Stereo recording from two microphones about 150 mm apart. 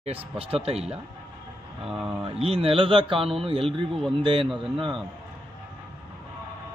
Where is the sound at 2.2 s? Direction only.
40° right (ahead or behind).